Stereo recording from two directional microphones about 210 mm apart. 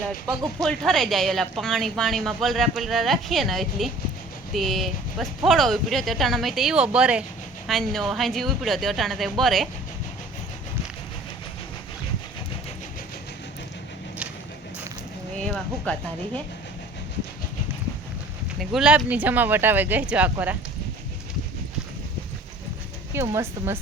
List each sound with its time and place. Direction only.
0.6 s speech: centre (ahead or behind)
15.4 s speech: 5° left (ahead or behind)
18.6 s speech: centre (ahead or behind)
23.1 s speech: 10° right (ahead or behind)